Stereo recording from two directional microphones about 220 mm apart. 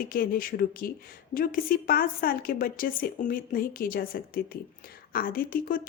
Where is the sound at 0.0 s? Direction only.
40° left (ahead or behind).